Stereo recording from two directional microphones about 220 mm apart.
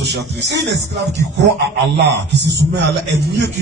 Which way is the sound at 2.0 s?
50° right (ahead or behind).